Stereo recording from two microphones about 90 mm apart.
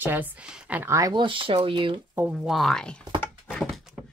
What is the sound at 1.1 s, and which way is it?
Speech, 65° right (ahead or behind).